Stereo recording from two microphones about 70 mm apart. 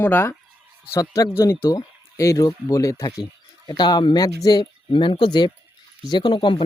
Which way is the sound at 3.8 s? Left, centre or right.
Left.